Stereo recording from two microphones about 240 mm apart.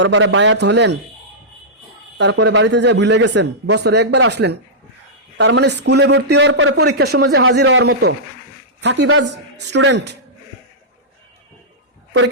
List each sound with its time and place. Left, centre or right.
0.0 s a man's voice: right
2.1 s a man's voice: right